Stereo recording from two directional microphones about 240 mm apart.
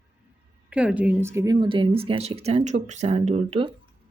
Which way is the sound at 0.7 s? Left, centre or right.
Centre.